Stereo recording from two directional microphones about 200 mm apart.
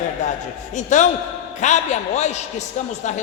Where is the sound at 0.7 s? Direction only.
40° left (ahead or behind).